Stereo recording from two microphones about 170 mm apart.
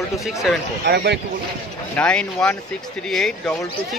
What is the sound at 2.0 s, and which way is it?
A man's voice, 5° left (ahead or behind).